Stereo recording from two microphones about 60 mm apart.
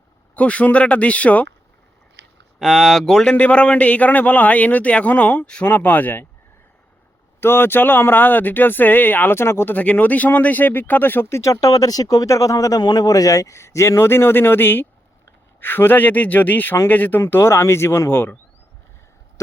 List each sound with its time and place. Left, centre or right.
0.3 s a man's voice: left
2.6 s speech: centre
3.3 s a man's voice: left
7.4 s speech: left
9.7 s a man's voice: left
11.3 s speech: left